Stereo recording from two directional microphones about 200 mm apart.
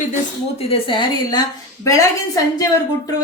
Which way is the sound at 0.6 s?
30° left (ahead or behind).